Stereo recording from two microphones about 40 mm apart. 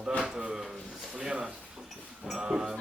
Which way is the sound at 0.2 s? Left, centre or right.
Right.